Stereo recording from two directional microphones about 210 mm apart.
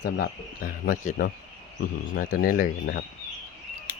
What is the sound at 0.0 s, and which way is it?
Speech, 45° left (ahead or behind).